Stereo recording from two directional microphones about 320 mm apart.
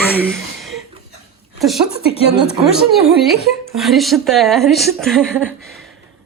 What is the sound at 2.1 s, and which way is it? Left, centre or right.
Speech, centre.